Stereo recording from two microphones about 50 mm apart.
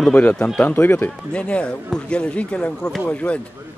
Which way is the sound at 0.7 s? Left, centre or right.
Left.